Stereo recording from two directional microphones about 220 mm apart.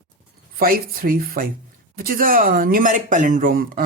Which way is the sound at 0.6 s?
40° right (ahead or behind).